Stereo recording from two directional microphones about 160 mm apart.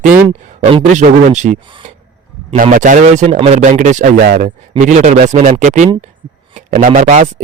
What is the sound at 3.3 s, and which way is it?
Speech, 35° right (ahead or behind).